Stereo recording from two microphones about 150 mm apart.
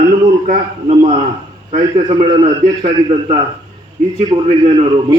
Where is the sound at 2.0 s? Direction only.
30° right (ahead or behind).